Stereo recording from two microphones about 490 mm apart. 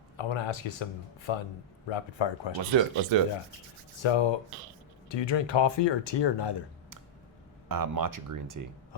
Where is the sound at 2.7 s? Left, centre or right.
Right.